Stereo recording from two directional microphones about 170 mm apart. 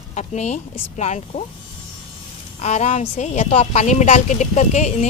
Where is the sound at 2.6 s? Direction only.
40° left (ahead or behind).